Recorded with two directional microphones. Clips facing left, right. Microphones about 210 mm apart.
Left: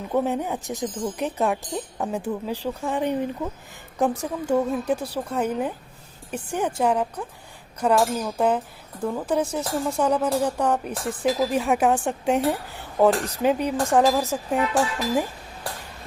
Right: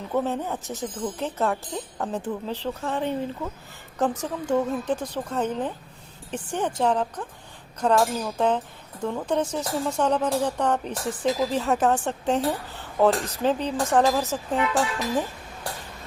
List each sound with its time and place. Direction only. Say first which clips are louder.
0.1 s speech: left 2 dB; 15° left (ahead or behind)